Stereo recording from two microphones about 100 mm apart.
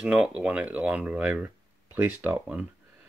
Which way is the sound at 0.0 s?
10° right (ahead or behind).